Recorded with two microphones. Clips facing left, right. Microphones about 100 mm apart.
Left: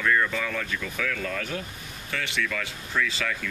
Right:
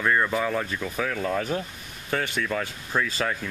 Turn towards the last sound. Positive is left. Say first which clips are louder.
# right 2 dB
turn(degrees=-40)  # may be behind; listen again after turning